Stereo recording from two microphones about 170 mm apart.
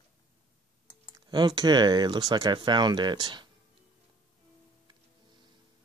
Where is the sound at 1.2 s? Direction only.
25° right (ahead or behind).